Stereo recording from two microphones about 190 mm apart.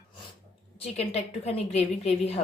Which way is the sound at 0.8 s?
35° left (ahead or behind).